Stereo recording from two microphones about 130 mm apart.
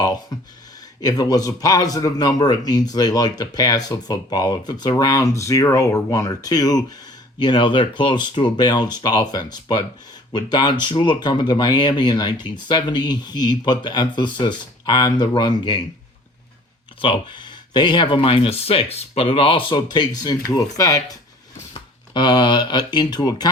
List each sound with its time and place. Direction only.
0.0 s a sound: 30° left (ahead or behind)
1.0 s speech: 30° left (ahead or behind)
17.0 s speech: 40° left (ahead or behind)